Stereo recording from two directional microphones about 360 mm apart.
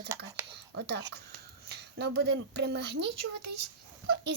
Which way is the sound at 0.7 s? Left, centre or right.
Right.